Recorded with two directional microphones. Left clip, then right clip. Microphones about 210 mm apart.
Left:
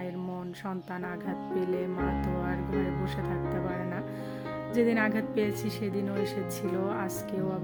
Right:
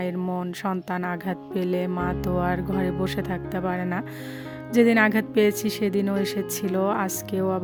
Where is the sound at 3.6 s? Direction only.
45° right (ahead or behind).